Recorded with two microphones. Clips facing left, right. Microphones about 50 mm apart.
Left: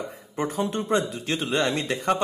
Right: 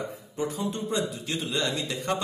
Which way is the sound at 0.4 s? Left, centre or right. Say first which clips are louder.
Left 4 dB; left.